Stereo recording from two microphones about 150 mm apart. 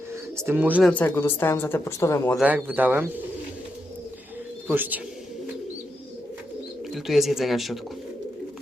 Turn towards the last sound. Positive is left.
turn(degrees=0)  # may be behind; listen again after turning